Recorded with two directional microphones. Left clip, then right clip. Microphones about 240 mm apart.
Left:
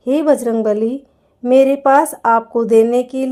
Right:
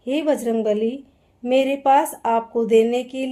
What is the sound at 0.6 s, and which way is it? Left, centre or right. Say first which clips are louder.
Speech: left 4 dB; left.